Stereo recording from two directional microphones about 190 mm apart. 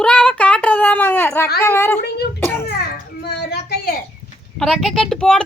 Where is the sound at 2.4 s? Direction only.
10° left (ahead or behind).